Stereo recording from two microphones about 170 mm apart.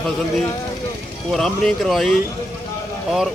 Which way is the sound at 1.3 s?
Centre (ahead or behind).